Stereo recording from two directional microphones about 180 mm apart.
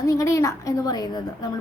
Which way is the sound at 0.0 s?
20° left (ahead or behind).